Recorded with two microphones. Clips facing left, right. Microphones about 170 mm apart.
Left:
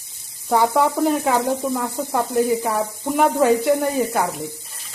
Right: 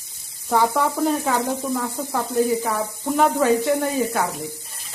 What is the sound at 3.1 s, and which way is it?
Speech, 15° left (ahead or behind).